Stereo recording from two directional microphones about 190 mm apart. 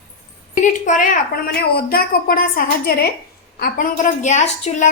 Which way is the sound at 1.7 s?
55° left (ahead or behind).